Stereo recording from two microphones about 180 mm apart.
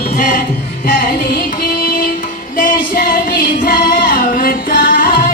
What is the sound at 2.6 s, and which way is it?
Music, 50° left (ahead or behind).